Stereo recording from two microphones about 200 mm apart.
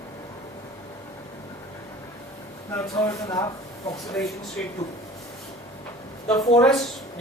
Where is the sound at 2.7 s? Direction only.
15° left (ahead or behind).